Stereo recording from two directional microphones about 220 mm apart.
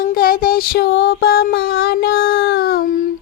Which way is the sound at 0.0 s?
40° left (ahead or behind).